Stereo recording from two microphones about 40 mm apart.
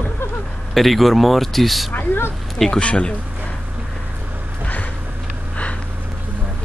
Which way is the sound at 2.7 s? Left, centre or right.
Left.